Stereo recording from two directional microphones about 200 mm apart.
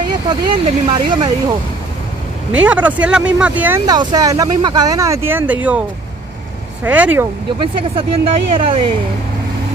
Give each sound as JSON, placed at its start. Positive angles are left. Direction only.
{"t": 0.3, "sound": "speech", "side_deg": -25}
{"t": 2.6, "sound": "speech", "side_deg": -5}
{"t": 3.8, "sound": "speech", "side_deg": -20}
{"t": 7.5, "sound": "speech", "side_deg": -25}